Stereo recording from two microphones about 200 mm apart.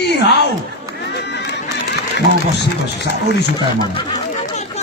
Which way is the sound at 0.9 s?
55° left (ahead or behind).